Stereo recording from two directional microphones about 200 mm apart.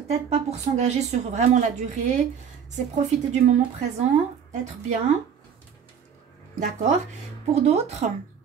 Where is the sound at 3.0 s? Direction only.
35° right (ahead or behind).